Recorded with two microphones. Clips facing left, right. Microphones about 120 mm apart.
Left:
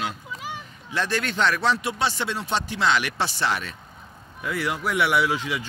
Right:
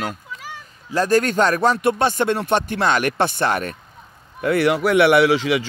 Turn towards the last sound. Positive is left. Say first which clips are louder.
# right 8 dB
turn(degrees=-80)